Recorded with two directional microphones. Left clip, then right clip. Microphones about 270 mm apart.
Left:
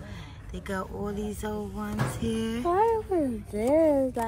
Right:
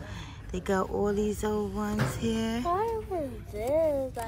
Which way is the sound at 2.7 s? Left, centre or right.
Left.